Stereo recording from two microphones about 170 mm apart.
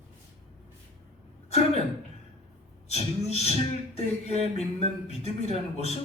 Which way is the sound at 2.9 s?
40° left (ahead or behind).